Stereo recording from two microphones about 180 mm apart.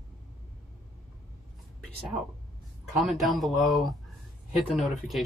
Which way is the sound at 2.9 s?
Centre (ahead or behind).